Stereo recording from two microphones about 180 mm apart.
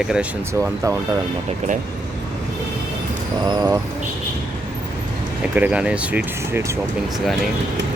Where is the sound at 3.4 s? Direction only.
25° right (ahead or behind).